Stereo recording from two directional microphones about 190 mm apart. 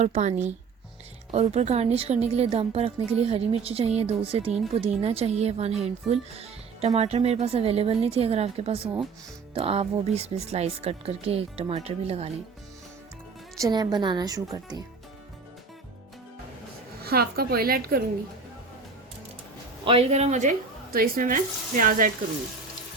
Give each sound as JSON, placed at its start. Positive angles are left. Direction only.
{"t": 0.0, "sound": "speech", "side_deg": -35}
{"t": 13.6, "sound": "a woman's voice", "side_deg": -20}
{"t": 17.0, "sound": "speech", "side_deg": -55}
{"t": 19.8, "sound": "speech", "side_deg": -30}